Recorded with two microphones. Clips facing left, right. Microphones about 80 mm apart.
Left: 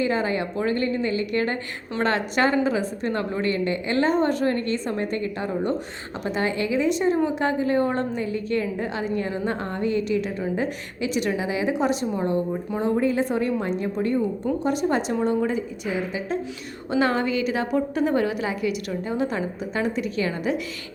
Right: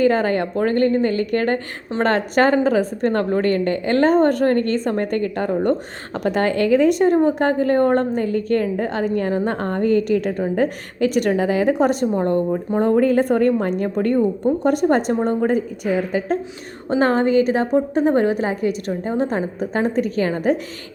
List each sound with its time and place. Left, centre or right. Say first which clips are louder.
0.0 s a woman's voice: right 6 dB; right